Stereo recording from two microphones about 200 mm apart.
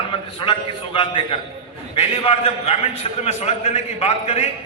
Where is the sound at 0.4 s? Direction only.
25° left (ahead or behind).